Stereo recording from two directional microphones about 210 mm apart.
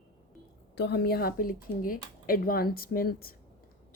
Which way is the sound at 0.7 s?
50° left (ahead or behind).